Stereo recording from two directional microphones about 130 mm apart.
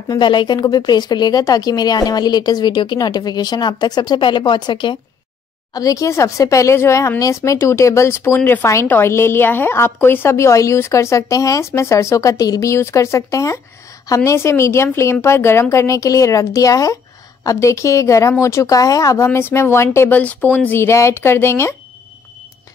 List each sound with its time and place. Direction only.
0.1 s a woman's voice: 35° left (ahead or behind); by 21.7 s 20° left (ahead or behind)